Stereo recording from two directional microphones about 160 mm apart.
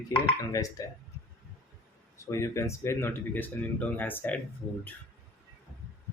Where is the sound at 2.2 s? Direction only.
20° left (ahead or behind).